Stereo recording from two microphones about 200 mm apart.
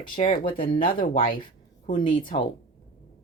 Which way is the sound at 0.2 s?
25° left (ahead or behind).